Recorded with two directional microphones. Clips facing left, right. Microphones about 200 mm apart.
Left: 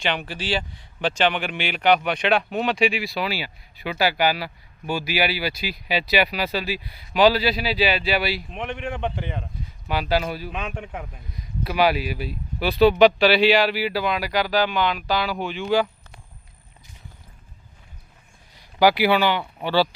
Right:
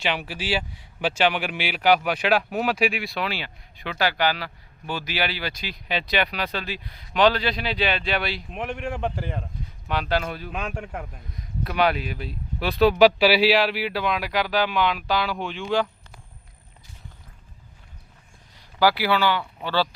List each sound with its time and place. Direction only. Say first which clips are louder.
0.0 s speech: left 1 dB; 5° right (ahead or behind)
18.5 s speech: left 3 dB; 15° left (ahead or behind)